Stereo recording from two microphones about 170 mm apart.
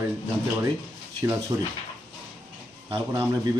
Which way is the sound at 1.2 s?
15° right (ahead or behind).